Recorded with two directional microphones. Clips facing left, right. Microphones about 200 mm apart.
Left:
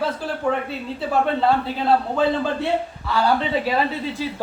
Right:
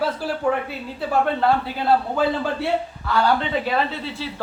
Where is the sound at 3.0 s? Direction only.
5° left (ahead or behind).